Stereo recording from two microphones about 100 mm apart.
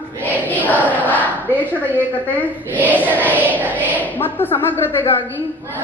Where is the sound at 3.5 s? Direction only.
15° left (ahead or behind).